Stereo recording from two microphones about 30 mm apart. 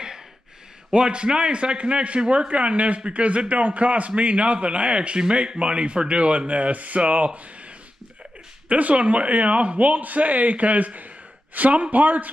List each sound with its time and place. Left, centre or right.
0.9 s a man's voice: right
8.6 s a man's voice: right
11.6 s speech: right
11.9 s speech: right